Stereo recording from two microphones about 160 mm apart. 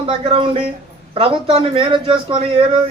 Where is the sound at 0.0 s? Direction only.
35° right (ahead or behind).